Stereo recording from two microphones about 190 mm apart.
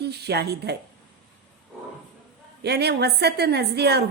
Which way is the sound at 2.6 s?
60° right (ahead or behind).